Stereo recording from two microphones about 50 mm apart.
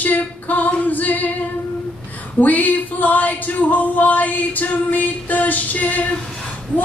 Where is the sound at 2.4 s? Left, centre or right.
Left.